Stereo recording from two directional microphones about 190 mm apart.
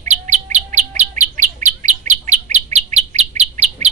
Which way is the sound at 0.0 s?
40° right (ahead or behind).